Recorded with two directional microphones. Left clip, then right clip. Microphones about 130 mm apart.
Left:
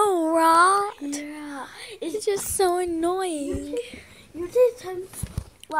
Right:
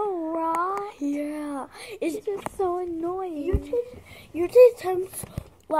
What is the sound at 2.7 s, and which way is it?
Speech, 30° left (ahead or behind).